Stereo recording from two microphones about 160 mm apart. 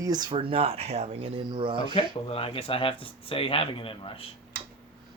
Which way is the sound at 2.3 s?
35° left (ahead or behind).